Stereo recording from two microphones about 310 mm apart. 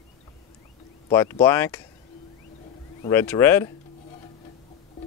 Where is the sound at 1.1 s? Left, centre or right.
Centre.